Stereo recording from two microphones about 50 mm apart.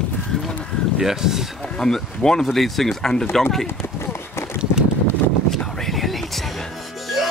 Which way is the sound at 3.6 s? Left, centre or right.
Left.